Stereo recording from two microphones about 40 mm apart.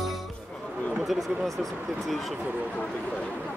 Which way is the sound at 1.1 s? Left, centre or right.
Centre.